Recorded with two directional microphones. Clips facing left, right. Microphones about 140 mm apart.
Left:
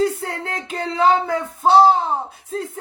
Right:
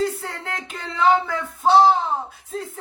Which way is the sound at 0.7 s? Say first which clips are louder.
Left 2 dB; 35° left (ahead or behind).